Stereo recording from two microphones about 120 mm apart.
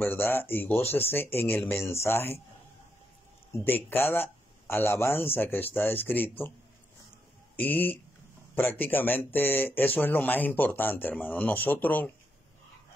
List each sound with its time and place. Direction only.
0.0 s speech: 20° left (ahead or behind)
3.5 s speech: 15° left (ahead or behind)
7.5 s speech: 15° left (ahead or behind)